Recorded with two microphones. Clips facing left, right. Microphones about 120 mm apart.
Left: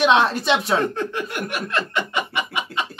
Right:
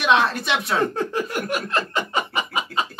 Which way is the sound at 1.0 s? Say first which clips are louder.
Right 1 dB; 35° right (ahead or behind).